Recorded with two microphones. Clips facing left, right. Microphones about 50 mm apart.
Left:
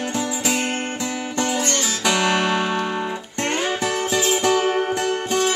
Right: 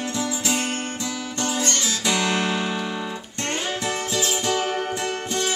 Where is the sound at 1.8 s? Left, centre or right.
Left.